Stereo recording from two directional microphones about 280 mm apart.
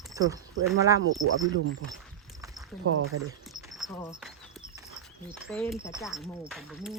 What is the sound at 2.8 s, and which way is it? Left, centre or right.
Speech, right.